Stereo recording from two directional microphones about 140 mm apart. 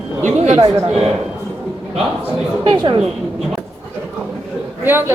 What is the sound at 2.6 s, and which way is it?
Speech, 35° right (ahead or behind).